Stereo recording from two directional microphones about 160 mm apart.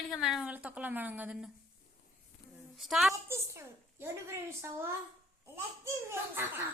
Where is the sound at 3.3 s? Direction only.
15° right (ahead or behind).